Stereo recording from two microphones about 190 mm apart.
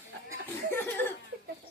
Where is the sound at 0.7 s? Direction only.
10° left (ahead or behind).